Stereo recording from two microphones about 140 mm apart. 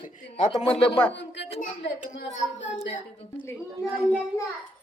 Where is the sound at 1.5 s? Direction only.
65° left (ahead or behind).